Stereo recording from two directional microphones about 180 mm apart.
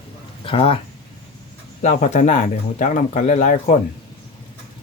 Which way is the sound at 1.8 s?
45° left (ahead or behind).